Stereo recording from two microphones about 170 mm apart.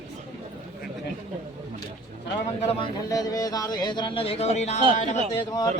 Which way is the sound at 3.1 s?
20° left (ahead or behind).